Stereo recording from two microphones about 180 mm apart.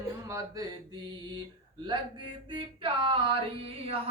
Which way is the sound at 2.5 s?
25° right (ahead or behind).